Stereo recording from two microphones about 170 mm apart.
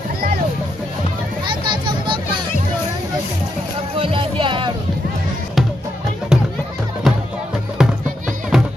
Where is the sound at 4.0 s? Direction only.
30° right (ahead or behind).